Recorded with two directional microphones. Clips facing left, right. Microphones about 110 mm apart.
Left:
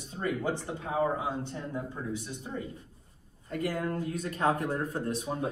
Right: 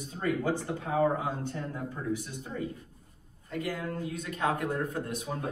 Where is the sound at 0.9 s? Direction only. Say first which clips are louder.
Right 2 dB; 20° left (ahead or behind).